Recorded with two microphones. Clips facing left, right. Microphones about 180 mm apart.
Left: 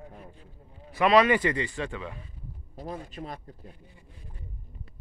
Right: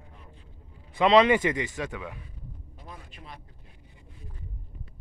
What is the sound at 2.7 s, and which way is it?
Speech, 40° left (ahead or behind).